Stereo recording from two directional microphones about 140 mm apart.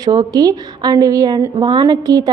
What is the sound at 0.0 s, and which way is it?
A woman's voice, 30° right (ahead or behind).